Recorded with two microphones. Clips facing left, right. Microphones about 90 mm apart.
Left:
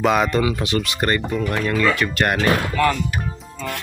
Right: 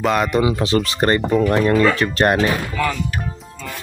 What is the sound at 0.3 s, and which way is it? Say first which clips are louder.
Speech: right 3 dB; 25° right (ahead or behind).